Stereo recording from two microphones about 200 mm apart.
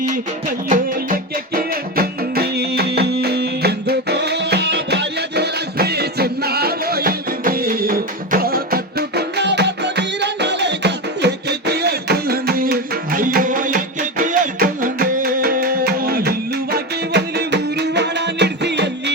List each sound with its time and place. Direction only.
0.7 s music: 45° right (ahead or behind)